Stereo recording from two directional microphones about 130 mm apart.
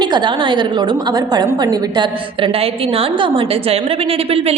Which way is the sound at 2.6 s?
45° right (ahead or behind).